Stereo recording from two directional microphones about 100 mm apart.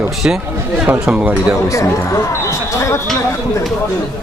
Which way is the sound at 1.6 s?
30° left (ahead or behind).